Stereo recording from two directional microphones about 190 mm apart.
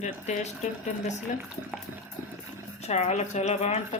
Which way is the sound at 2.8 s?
35° left (ahead or behind).